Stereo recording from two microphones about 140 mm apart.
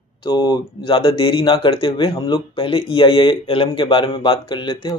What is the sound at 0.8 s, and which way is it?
Speech, 40° left (ahead or behind).